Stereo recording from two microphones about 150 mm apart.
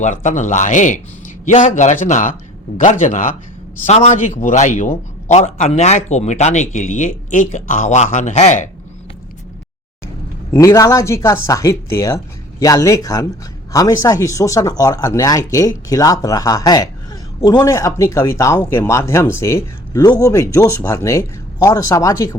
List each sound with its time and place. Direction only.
0.0 s a man's voice: 55° left (ahead or behind)
3.8 s a man's voice: 50° left (ahead or behind)
10.5 s speech: 20° left (ahead or behind)